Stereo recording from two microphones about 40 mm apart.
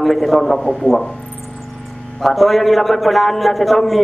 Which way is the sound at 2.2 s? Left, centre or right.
Centre.